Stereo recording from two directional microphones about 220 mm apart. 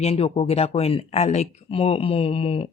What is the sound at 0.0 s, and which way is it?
Speech, 25° left (ahead or behind).